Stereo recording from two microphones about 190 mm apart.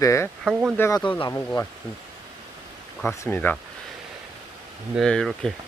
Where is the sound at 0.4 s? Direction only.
5° right (ahead or behind).